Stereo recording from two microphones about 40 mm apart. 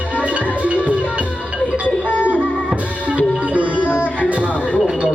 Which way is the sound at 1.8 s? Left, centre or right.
Left.